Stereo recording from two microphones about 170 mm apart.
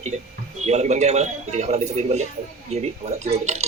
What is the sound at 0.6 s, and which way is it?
Speech, 40° right (ahead or behind).